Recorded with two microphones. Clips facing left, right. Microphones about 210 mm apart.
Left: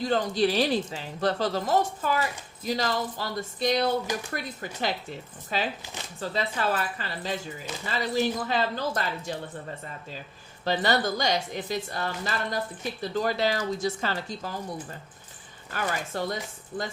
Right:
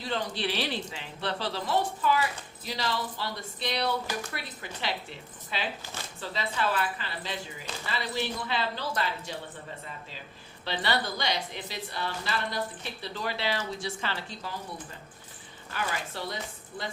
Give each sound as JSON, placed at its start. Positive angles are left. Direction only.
{"t": 0.0, "sound": "speech", "side_deg": 45}
{"t": 10.6, "sound": "speech", "side_deg": 45}
{"t": 15.7, "sound": "speech", "side_deg": 45}